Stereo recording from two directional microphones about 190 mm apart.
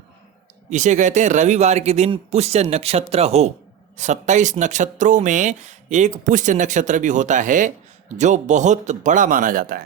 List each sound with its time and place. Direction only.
0.7 s speech: 40° right (ahead or behind)